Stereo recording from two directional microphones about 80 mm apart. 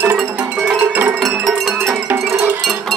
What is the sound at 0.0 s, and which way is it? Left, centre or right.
Music, right.